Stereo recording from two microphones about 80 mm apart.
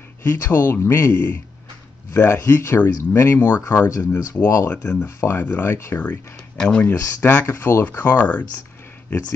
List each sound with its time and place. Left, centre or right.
0.3 s speech: left
6.5 s speech: centre
6.8 s speech: left